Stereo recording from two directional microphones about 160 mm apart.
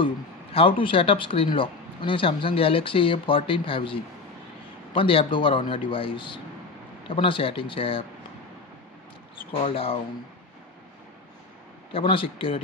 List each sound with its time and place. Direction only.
0.0 s speech: 35° left (ahead or behind)
9.5 s speech: 35° left (ahead or behind)
11.9 s speech: 35° left (ahead or behind)